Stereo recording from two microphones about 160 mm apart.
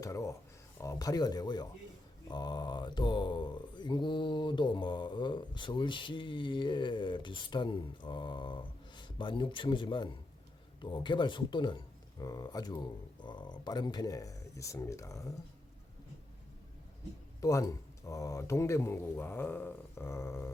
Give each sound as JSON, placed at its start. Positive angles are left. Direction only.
{"t": 0.0, "sound": "a sound", "side_deg": 20}
{"t": 0.8, "sound": "speech", "side_deg": 20}
{"t": 17.4, "sound": "speech", "side_deg": 20}